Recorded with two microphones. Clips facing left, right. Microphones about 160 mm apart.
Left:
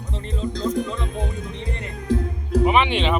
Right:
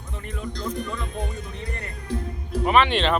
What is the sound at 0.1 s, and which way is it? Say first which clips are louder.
Speech: left 5 dB; 25° left (ahead or behind).